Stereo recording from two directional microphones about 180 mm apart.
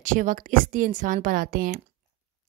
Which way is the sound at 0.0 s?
45° right (ahead or behind).